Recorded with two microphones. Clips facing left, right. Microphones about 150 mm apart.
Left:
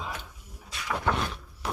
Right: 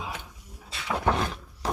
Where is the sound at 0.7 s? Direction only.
30° right (ahead or behind).